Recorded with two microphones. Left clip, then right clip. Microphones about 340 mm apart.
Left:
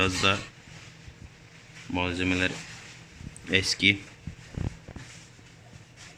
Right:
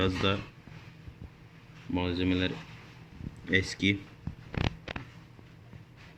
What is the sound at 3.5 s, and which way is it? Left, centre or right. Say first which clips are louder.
Speech: left 5 dB; centre.